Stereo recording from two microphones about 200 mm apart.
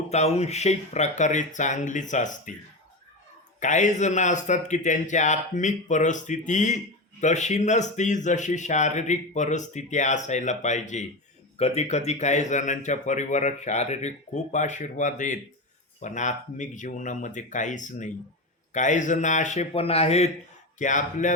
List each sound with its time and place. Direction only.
0.1 s speech: 35° left (ahead or behind)
3.6 s speech: 35° left (ahead or behind)